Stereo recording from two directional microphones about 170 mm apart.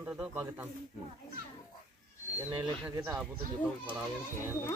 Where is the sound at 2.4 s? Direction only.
10° right (ahead or behind).